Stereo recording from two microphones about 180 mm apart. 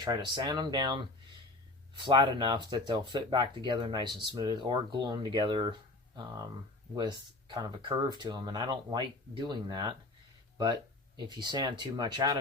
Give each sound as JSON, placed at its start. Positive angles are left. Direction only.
{"t": 0.0, "sound": "speech", "side_deg": -25}
{"t": 2.0, "sound": "speech", "side_deg": -25}
{"t": 6.9, "sound": "speech", "side_deg": -25}
{"t": 11.2, "sound": "speech", "side_deg": -25}